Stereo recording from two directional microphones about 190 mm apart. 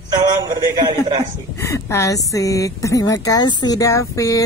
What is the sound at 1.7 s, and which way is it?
A woman's voice, 15° left (ahead or behind).